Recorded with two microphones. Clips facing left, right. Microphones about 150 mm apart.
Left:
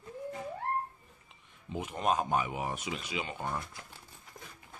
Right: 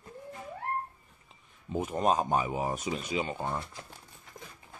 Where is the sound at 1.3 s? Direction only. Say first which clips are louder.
Right 5 dB; 45° right (ahead or behind); by 3.7 s 25° right (ahead or behind).